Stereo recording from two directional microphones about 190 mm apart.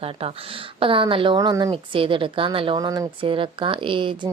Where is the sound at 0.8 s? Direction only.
30° right (ahead or behind).